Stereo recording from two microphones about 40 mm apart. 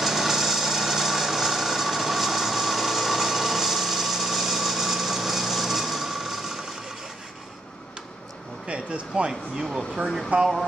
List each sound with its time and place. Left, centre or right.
0.0 s a sound: centre
8.6 s speech: right
9.3 s speech: centre
10.3 s speech: right